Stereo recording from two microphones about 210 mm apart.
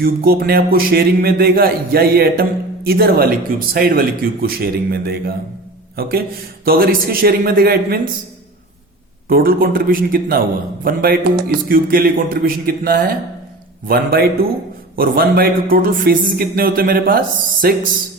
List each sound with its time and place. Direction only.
0.0 s speech: 45° right (ahead or behind)
9.3 s speech: 45° right (ahead or behind)